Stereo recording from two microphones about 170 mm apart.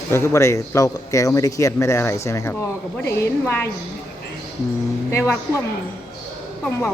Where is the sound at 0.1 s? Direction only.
15° left (ahead or behind).